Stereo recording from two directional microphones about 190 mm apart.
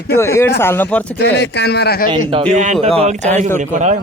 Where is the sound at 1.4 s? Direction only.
60° left (ahead or behind).